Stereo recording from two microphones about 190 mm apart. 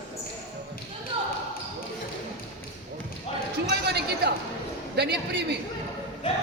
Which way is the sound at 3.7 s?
60° right (ahead or behind).